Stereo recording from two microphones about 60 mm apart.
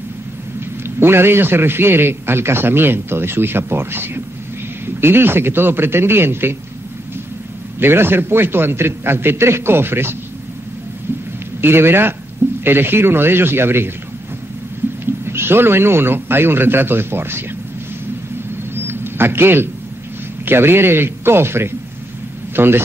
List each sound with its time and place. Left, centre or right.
0.8 s a man's voice: right
7.8 s a man's voice: right
11.6 s a man's voice: right
15.2 s a man's voice: right
18.9 s a sound: right
20.4 s a man's voice: right